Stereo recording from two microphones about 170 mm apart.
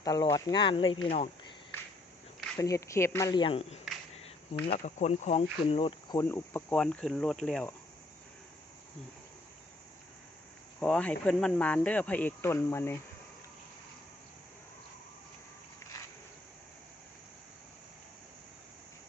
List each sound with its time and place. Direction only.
0.0 s speech: 25° left (ahead or behind)
2.6 s speech: 20° left (ahead or behind)
4.2 s a sound: 35° left (ahead or behind)
4.8 s speech: 45° left (ahead or behind)
6.1 s speech: 15° left (ahead or behind)
7.4 s cricket: 5° left (ahead or behind)
10.8 s speech: 5° left (ahead or behind)